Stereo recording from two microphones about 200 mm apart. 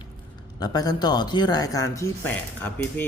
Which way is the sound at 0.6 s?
20° left (ahead or behind).